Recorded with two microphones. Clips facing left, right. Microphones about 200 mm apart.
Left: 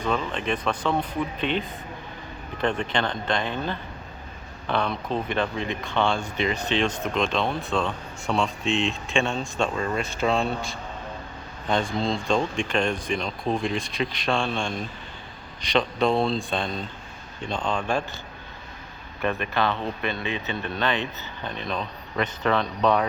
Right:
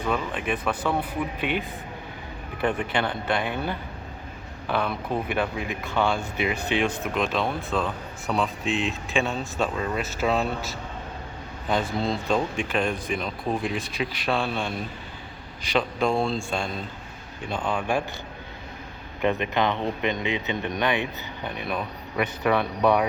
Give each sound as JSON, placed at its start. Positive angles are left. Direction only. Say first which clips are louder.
{"t": 0.1, "sound": "speech", "louder": "left 1 dB", "side_deg": -15}
{"t": 16.0, "sound": "speech", "louder": "left 2 dB", "side_deg": 0}
{"t": 17.7, "sound": "speech", "louder": "even", "side_deg": -15}
{"t": 19.2, "sound": "speech", "louder": "right 2 dB", "side_deg": -20}